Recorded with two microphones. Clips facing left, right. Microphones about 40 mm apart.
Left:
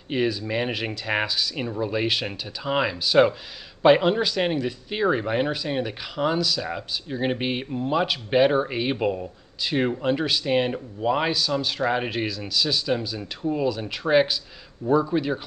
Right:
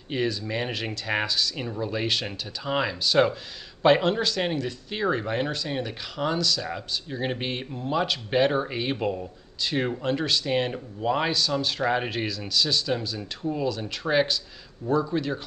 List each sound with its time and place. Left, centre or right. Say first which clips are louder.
0.1 s speech: left 3 dB; centre